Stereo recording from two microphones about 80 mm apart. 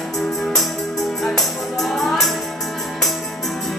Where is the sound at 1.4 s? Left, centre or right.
Centre.